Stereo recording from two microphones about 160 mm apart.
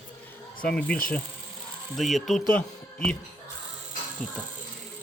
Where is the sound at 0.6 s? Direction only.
5° left (ahead or behind).